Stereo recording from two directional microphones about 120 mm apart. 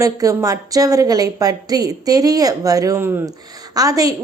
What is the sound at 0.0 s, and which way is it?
A woman's voice, 30° right (ahead or behind).